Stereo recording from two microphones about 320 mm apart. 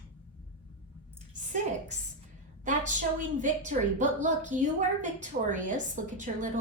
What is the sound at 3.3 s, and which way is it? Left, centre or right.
A woman's voice, right.